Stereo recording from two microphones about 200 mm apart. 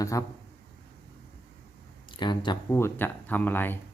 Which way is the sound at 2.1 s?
20° left (ahead or behind).